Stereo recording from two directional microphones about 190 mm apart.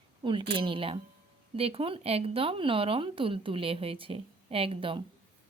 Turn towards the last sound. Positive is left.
turn(degrees=-30)  # may be behind; listen again after turning